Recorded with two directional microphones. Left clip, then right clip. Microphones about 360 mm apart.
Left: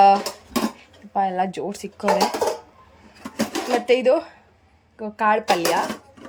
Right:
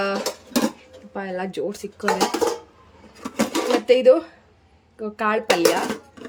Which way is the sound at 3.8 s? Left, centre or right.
Centre.